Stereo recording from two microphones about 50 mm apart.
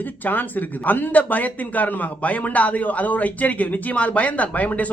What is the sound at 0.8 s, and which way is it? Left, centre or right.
A man's voice, left.